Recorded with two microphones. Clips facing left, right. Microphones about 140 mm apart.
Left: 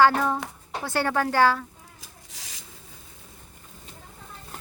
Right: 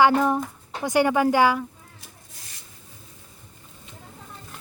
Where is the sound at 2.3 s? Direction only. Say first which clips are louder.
Left 2 dB; 90° left.